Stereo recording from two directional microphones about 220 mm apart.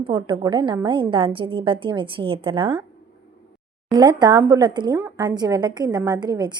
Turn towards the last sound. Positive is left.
turn(degrees=-20)  # may be behind; listen again after turning